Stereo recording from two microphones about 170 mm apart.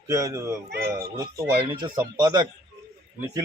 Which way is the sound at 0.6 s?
65° right (ahead or behind).